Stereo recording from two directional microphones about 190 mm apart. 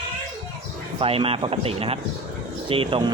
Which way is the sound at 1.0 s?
30° right (ahead or behind).